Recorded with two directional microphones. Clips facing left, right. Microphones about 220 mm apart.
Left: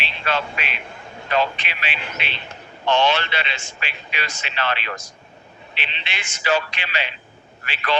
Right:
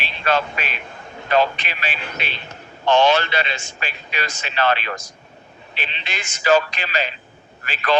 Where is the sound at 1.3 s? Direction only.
40° right (ahead or behind).